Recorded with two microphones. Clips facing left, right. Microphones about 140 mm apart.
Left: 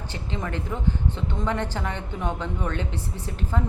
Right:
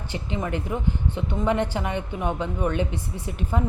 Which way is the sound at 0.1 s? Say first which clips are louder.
Right 4 dB; 15° right (ahead or behind).